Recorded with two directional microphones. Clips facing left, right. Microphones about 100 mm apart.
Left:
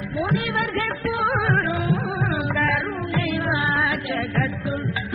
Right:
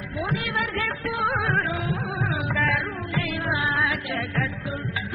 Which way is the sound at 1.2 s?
25° left (ahead or behind).